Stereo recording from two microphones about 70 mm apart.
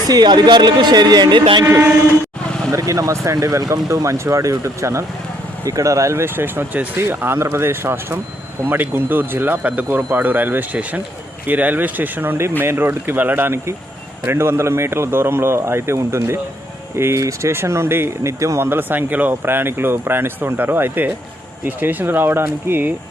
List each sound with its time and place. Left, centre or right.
0.1 s speech: right
2.7 s speech: right
7.3 s speech: right
18.7 s speech: right